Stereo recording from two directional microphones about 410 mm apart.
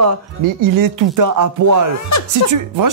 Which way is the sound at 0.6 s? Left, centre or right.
Right.